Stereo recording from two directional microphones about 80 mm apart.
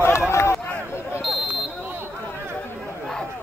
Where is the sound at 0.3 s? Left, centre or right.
Left.